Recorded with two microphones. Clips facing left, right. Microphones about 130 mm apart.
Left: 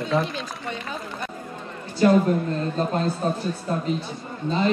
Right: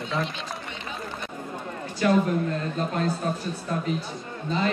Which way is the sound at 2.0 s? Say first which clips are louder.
Left 5 dB; 35° left (ahead or behind).